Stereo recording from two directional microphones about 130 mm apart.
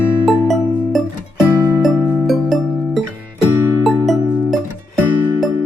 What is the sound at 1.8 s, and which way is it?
Music, centre (ahead or behind).